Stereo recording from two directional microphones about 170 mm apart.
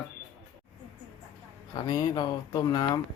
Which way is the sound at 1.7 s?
25° left (ahead or behind).